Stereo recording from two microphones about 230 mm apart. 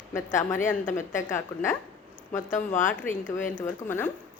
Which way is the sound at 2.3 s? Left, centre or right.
Left.